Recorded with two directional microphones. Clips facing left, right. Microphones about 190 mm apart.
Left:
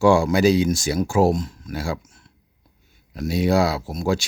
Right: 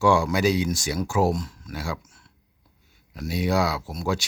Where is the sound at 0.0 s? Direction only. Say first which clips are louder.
Left 5 dB; 30° left (ahead or behind).